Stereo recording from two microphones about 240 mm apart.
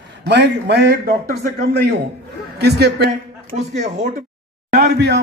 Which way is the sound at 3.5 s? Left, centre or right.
Right.